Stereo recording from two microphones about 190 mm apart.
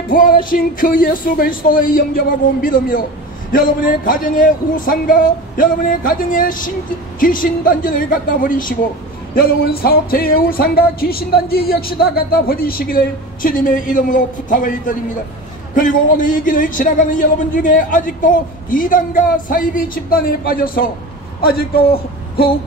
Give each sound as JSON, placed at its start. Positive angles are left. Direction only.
{"t": 0.1, "sound": "music", "side_deg": 45}
{"t": 21.4, "sound": "a man's voice", "side_deg": 50}